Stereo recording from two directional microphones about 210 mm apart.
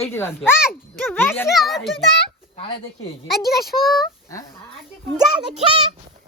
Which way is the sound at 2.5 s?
25° left (ahead or behind).